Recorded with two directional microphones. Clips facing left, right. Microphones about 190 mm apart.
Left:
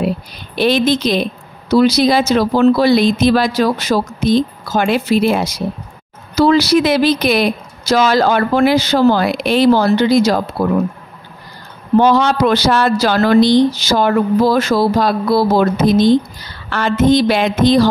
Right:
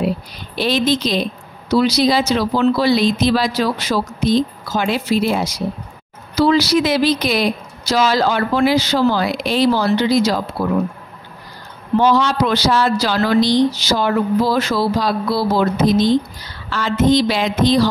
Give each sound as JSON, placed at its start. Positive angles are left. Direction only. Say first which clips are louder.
{"t": 0.6, "sound": "speech", "louder": "left 4 dB", "side_deg": 55}
{"t": 6.3, "sound": "speech", "louder": "left 3 dB", "side_deg": 50}
{"t": 12.0, "sound": "speech", "louder": "left 3 dB", "side_deg": 55}